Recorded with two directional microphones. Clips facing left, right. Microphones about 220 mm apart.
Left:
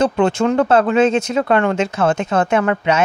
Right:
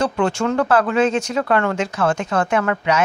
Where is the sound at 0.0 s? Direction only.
20° left (ahead or behind).